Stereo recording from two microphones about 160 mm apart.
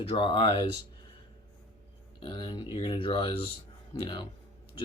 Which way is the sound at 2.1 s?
30° left (ahead or behind).